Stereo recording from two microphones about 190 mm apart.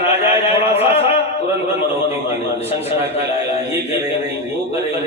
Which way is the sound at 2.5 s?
35° left (ahead or behind).